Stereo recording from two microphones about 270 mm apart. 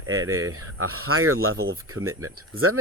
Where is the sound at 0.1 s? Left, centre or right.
Right.